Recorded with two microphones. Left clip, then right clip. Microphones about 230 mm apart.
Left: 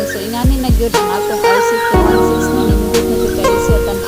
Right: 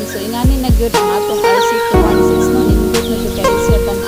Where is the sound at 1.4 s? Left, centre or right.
Left.